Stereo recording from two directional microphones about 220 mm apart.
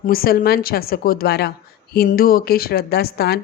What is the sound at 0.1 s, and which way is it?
Speech, 40° left (ahead or behind).